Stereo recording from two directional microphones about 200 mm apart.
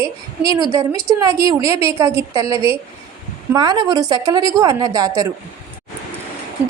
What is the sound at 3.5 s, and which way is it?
A woman's voice, 20° right (ahead or behind).